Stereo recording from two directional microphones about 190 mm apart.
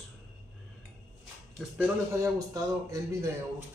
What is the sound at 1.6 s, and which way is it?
Speech, 10° right (ahead or behind).